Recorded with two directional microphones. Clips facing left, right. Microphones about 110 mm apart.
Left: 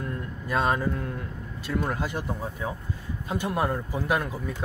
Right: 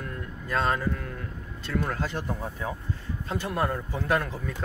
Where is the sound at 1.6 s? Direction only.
15° left (ahead or behind).